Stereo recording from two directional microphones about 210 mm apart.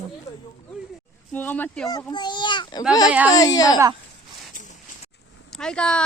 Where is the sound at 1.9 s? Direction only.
20° left (ahead or behind).